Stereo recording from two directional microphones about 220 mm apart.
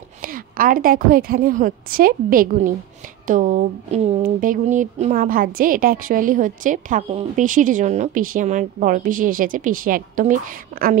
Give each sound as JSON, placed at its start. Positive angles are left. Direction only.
{"t": 0.2, "sound": "speech", "side_deg": -40}